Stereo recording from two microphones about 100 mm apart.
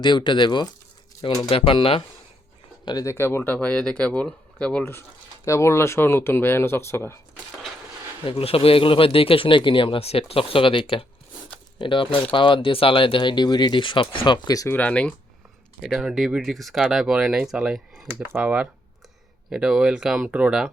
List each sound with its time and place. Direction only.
0.0 s speech: 50° left (ahead or behind)
2.8 s speech: 40° left (ahead or behind)
3.1 s speech: 25° left (ahead or behind)
5.5 s speech: 30° left (ahead or behind)
8.2 s speech: 65° left (ahead or behind)
14.7 s speech: 15° left (ahead or behind)
15.8 s speech: 5° right (ahead or behind)
18.1 s speech: 20° right (ahead or behind)